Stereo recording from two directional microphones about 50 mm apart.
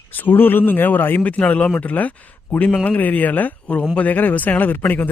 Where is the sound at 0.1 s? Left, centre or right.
Left.